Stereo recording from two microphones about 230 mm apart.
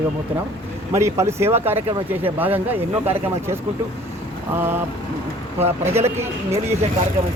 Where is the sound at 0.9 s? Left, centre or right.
Centre.